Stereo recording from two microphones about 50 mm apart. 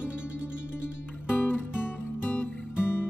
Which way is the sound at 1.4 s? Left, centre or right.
Left.